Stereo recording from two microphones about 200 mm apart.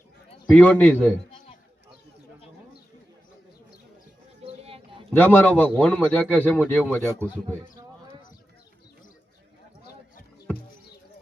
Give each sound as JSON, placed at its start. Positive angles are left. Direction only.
{"t": 0.5, "sound": "speech", "side_deg": 5}
{"t": 4.4, "sound": "a sound", "side_deg": -25}
{"t": 5.1, "sound": "speech", "side_deg": 10}